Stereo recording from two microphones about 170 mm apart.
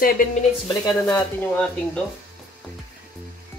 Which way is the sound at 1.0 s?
5° left (ahead or behind).